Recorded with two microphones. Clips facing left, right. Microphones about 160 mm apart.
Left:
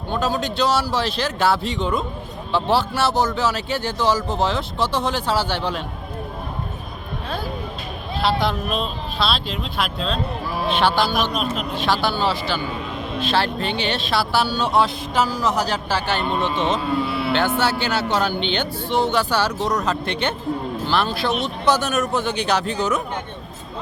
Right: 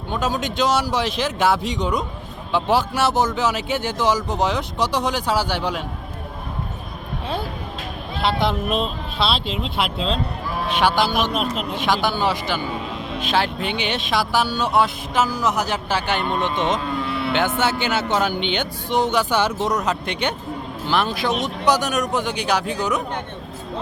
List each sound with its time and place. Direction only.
0.1 s a man's voice: 15° right (ahead or behind)
8.3 s speech: 20° right (ahead or behind)
10.8 s a man's voice: 10° right (ahead or behind)
15.9 s a man's voice: 15° right (ahead or behind)